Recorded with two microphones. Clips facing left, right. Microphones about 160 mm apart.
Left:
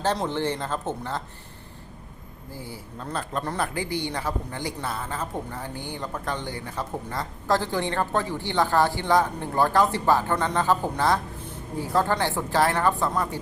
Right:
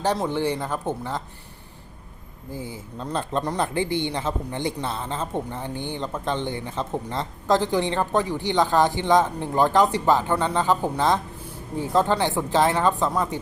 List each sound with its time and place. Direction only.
0.3 s speech: 10° right (ahead or behind)
2.5 s a woman's voice: 20° right (ahead or behind)